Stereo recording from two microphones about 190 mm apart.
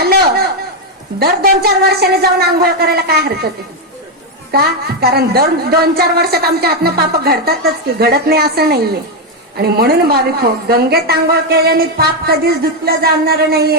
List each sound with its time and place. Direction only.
0.0 s a sound: 55° right (ahead or behind)
1.2 s a woman's voice: 55° right (ahead or behind)
4.5 s a woman's voice: 55° right (ahead or behind)